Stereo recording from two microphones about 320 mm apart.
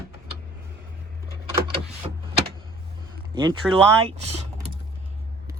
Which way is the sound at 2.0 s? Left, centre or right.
Centre.